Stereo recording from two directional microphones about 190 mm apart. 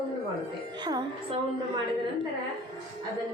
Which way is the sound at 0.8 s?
20° right (ahead or behind).